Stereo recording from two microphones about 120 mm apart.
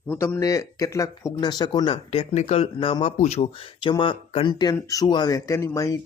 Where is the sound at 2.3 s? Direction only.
65° left (ahead or behind); by 3.1 s 45° left (ahead or behind).